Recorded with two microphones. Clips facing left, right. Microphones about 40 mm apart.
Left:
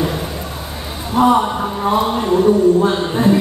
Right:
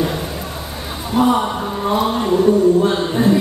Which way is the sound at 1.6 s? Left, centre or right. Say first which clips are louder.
Left 2 dB; centre.